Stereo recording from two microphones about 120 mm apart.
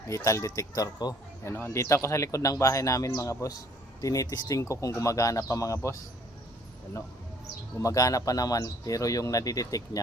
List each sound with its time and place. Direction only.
0.1 s speech: 25° left (ahead or behind)
1.5 s speech: 20° left (ahead or behind)
7.8 s speech: 30° left (ahead or behind)